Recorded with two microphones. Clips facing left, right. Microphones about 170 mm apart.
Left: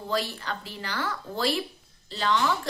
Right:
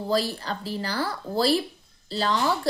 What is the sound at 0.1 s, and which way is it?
A woman's voice, 35° right (ahead or behind).